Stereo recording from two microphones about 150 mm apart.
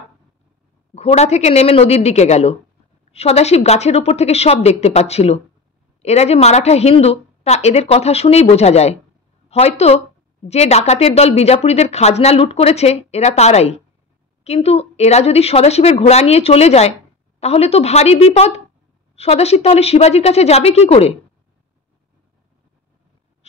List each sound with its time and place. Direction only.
0.9 s a woman's voice: 45° left (ahead or behind)